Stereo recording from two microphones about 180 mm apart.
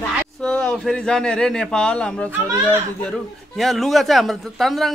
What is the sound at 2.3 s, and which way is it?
Speech, 15° right (ahead or behind).